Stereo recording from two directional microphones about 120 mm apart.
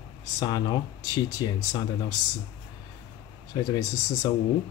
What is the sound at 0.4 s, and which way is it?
Speech, 35° left (ahead or behind).